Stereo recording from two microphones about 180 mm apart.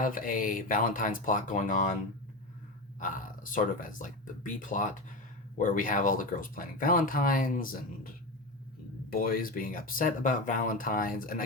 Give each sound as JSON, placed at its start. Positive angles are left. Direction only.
{"t": 0.0, "sound": "speech", "side_deg": 50}
{"t": 3.0, "sound": "speech", "side_deg": 45}